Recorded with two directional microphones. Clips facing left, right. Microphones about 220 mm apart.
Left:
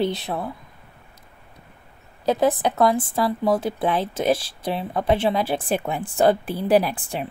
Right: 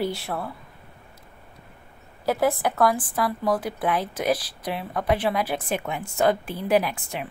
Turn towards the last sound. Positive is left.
turn(degrees=35)  # may be behind; listen again after turning